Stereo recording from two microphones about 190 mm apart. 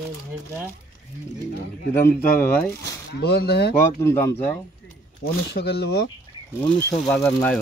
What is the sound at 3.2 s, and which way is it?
Speech, 55° left (ahead or behind).